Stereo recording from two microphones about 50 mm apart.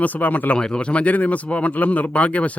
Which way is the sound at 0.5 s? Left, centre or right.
Centre.